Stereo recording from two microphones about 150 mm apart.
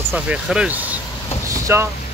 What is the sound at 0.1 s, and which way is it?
Speech, 5° right (ahead or behind).